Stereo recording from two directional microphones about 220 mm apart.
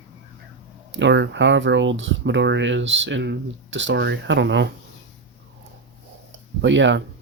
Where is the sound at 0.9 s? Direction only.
55° right (ahead or behind).